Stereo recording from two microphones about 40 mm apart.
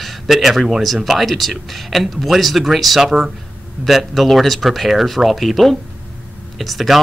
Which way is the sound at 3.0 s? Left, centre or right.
Centre.